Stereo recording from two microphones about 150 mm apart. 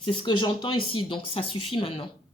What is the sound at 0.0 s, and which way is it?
Speech, 30° left (ahead or behind).